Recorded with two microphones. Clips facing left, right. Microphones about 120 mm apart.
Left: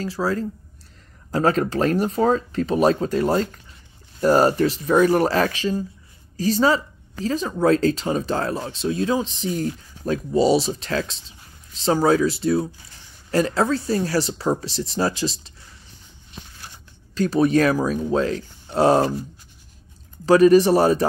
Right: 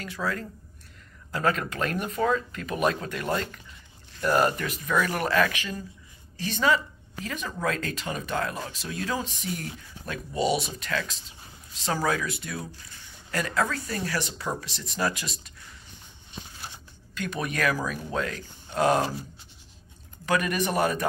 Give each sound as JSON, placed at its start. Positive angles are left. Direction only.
{"t": 0.0, "sound": "speech", "side_deg": 30}
{"t": 17.1, "sound": "speech", "side_deg": 35}
{"t": 20.2, "sound": "speech", "side_deg": 35}